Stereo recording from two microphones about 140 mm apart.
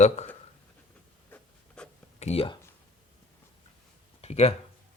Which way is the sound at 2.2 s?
45° left (ahead or behind).